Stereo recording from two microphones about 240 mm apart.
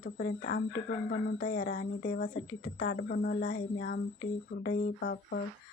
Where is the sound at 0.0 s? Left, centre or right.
Left.